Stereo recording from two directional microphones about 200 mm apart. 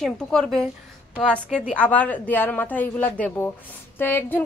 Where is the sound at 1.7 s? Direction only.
5° left (ahead or behind).